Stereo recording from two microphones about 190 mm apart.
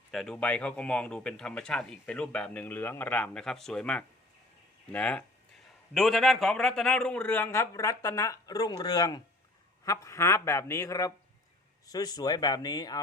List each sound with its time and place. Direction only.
0.1 s a man's voice: centre (ahead or behind); by 13.0 s 20° left (ahead or behind)